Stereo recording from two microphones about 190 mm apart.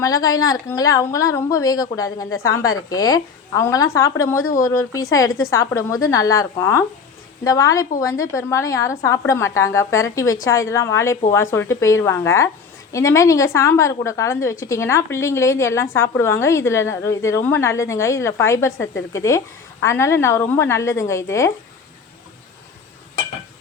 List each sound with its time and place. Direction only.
0.0 s a woman's voice: 15° left (ahead or behind)